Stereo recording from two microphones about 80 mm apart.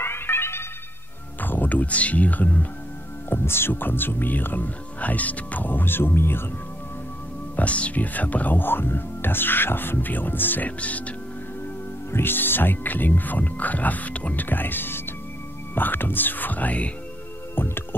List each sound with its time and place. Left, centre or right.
0.0 s telephone: left
1.4 s speech: left
7.5 s speech: centre